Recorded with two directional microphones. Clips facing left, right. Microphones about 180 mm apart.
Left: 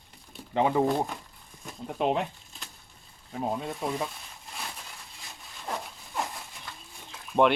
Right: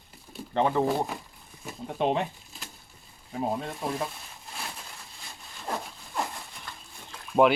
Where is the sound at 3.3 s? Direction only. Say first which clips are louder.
Right 1 dB; centre (ahead or behind).